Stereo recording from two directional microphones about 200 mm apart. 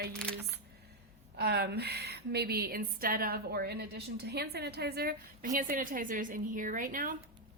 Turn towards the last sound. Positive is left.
turn(degrees=-45)  # may be behind; listen again after turning